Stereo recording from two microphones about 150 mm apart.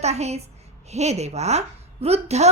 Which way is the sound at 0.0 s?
45° right (ahead or behind).